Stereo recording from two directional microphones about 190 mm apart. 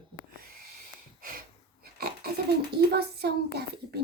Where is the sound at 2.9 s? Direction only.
60° right (ahead or behind).